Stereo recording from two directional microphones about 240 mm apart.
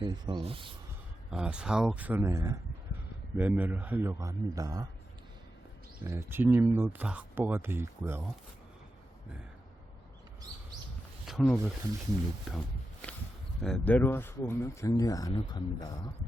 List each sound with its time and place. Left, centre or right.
0.0 s speech: centre
1.3 s speech: centre
6.1 s speech: centre
11.3 s speech: centre
12.5 s wild animals: centre
13.6 s speech: centre